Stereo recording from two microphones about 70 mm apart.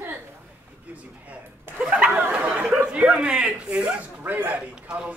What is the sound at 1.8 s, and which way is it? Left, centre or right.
Speech, centre.